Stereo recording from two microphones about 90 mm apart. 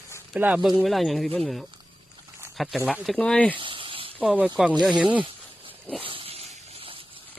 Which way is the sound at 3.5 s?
75° right (ahead or behind).